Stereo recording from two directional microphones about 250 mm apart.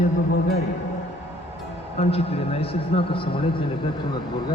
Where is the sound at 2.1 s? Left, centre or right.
Left.